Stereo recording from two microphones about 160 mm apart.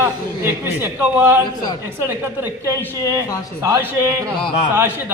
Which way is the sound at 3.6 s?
20° right (ahead or behind).